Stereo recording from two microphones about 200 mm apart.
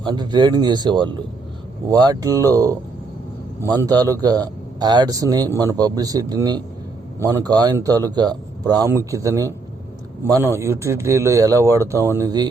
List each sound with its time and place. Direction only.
0.0 s a man's voice: 20° right (ahead or behind)